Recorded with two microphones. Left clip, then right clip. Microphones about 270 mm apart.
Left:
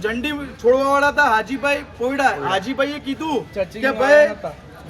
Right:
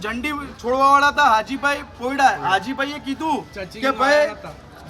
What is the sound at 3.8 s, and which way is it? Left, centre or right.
Speech, right.